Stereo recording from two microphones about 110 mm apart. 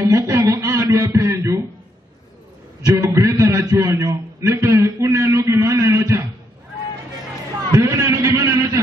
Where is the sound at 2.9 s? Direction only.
25° right (ahead or behind).